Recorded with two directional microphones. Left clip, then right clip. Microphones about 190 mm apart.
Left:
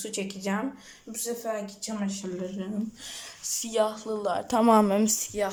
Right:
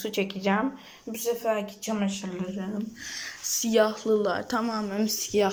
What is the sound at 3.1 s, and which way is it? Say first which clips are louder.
Speech: right 5 dB; 20° left (ahead or behind).